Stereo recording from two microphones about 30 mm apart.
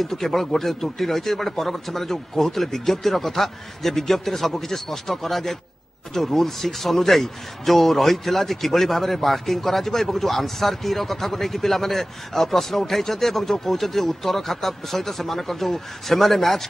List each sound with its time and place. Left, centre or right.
0.0 s a man's voice: centre